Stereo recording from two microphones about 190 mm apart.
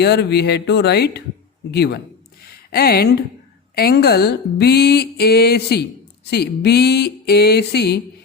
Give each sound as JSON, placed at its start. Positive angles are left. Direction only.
{"t": 0.0, "sound": "speech", "side_deg": 60}